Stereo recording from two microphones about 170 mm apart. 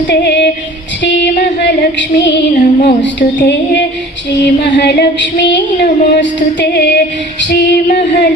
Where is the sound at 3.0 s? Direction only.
90° left.